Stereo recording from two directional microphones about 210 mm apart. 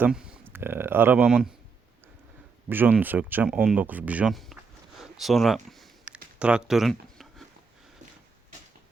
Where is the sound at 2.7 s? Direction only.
10° right (ahead or behind).